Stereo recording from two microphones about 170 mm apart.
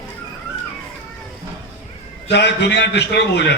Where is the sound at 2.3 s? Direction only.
85° left.